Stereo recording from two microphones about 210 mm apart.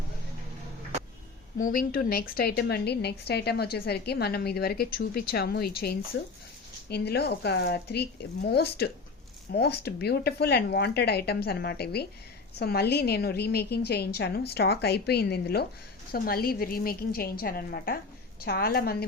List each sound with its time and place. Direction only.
1.5 s a woman's voice: 40° left (ahead or behind)